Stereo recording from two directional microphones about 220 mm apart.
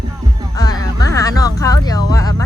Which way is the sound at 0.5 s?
15° left (ahead or behind).